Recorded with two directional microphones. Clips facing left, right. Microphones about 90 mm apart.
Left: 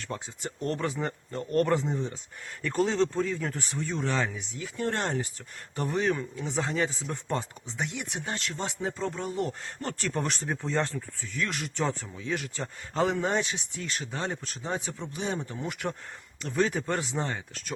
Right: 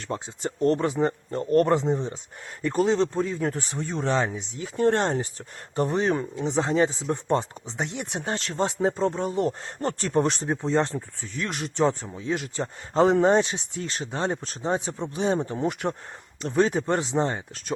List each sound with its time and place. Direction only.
0.0 s speech: 30° right (ahead or behind)